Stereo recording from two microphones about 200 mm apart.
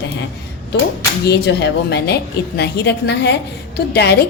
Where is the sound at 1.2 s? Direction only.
55° left (ahead or behind).